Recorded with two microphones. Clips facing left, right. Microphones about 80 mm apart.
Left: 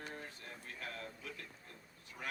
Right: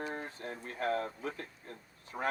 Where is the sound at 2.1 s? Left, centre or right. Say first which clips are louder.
Right 12 dB; right.